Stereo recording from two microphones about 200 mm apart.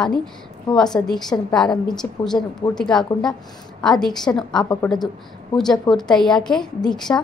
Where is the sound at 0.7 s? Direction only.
20° left (ahead or behind).